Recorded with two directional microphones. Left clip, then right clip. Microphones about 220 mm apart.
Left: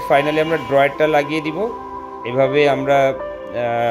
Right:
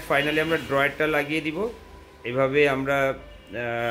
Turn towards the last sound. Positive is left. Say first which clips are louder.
# left 9 dB
turn(degrees=15)  # may be behind; listen again after turning